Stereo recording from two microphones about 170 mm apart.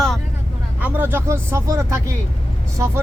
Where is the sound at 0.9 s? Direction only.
15° right (ahead or behind).